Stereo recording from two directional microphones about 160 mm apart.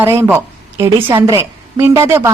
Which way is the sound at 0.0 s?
15° right (ahead or behind).